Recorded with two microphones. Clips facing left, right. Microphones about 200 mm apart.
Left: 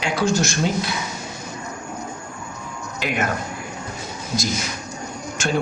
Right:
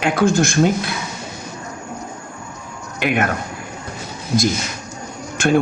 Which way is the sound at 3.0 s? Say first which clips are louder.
Right 6 dB; 60° right (ahead or behind).